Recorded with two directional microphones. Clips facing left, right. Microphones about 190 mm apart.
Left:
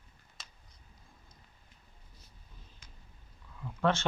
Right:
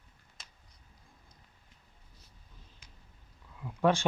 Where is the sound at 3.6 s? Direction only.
15° right (ahead or behind).